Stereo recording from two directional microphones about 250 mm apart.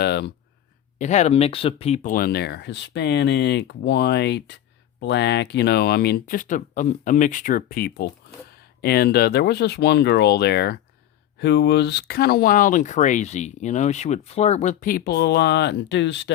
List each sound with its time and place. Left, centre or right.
0.0 s speech: left
0.9 s speech: left